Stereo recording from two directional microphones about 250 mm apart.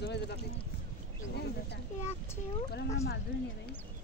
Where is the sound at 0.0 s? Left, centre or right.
Left.